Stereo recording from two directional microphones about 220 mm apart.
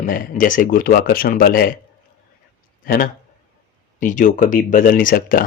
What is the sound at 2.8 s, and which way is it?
Speech, 40° left (ahead or behind).